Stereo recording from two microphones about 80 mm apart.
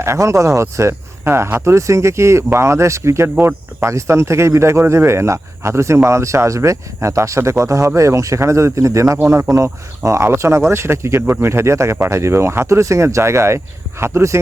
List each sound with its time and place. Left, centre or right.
0.0 s speech: right